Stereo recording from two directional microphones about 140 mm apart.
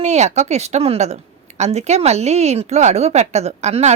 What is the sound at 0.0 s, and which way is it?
Speech, 55° right (ahead or behind).